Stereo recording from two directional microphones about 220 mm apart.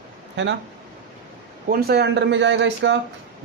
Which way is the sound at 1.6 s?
45° right (ahead or behind).